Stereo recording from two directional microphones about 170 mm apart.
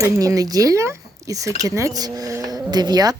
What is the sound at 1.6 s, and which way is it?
Speech, 20° right (ahead or behind).